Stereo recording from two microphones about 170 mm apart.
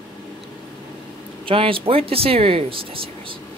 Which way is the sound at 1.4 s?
30° right (ahead or behind).